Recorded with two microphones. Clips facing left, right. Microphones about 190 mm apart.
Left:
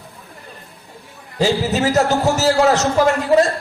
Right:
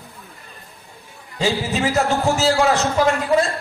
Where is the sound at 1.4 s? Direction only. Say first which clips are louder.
Left 4 dB; 40° left (ahead or behind).